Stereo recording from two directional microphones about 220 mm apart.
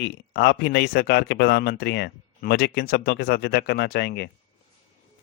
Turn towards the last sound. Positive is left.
turn(degrees=50)  # may be behind; listen again after turning